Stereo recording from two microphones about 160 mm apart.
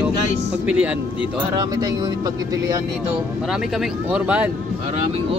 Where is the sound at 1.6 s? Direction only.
25° right (ahead or behind).